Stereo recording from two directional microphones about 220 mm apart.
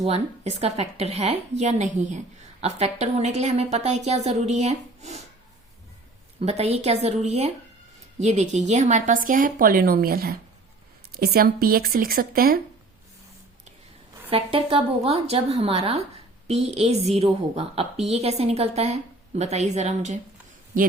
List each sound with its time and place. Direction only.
0.0 s a woman's voice: 30° right (ahead or behind)
6.4 s a woman's voice: 30° right (ahead or behind)
14.3 s a woman's voice: 25° right (ahead or behind)